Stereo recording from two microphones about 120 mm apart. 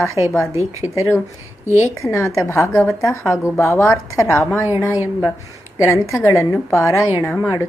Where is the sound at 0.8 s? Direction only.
10° right (ahead or behind).